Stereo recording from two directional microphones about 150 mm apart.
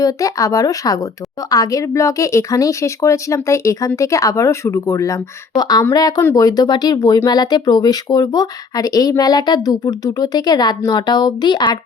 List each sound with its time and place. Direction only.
0.0 s speech: 20° left (ahead or behind)